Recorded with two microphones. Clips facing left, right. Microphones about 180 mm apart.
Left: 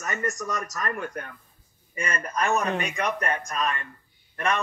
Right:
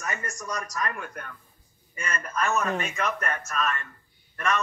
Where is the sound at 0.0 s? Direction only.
40° left (ahead or behind).